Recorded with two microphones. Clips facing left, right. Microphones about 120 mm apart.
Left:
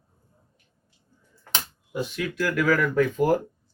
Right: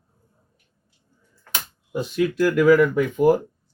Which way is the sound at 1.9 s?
35° right (ahead or behind).